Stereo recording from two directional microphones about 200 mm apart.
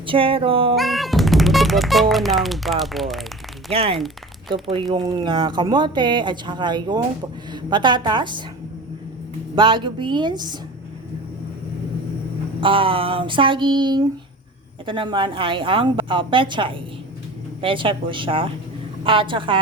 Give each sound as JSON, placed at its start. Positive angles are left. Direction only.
{"t": 0.0, "sound": "speech", "side_deg": -25}
{"t": 0.8, "sound": "speech", "side_deg": 0}
{"t": 3.7, "sound": "speech", "side_deg": -30}
{"t": 3.9, "sound": "a sound", "side_deg": 0}
{"t": 4.5, "sound": "speech", "side_deg": -25}
{"t": 9.6, "sound": "speech", "side_deg": -25}
{"t": 12.5, "sound": "speech", "side_deg": -25}